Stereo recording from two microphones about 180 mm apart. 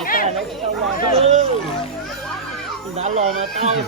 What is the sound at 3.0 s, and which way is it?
Speech, 40° right (ahead or behind).